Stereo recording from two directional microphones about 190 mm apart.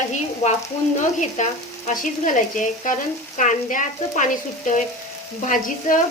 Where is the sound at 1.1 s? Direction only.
40° left (ahead or behind).